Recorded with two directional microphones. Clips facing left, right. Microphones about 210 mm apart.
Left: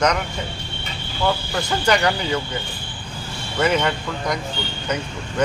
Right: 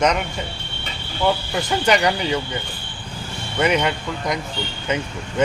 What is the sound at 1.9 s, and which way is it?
Speech, 20° right (ahead or behind).